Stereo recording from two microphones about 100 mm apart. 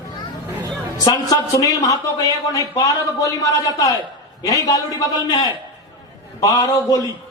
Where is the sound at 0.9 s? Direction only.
40° left (ahead or behind).